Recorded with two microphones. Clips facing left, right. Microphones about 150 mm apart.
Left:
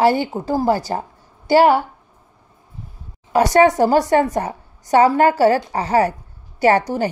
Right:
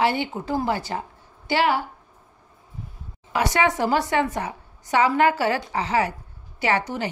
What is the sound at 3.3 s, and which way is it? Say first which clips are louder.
A woman's voice: left 9 dB; 40° left (ahead or behind).